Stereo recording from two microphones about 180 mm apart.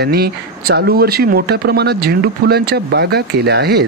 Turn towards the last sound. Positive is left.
turn(degrees=-65)  # may be behind; listen again after turning